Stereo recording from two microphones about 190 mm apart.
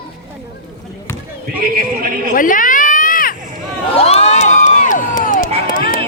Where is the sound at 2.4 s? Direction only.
45° left (ahead or behind).